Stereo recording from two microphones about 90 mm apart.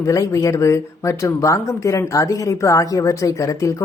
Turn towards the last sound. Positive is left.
turn(degrees=35)  # may be behind; listen again after turning